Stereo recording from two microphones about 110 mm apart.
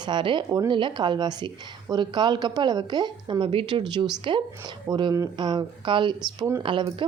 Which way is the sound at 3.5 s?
55° right (ahead or behind).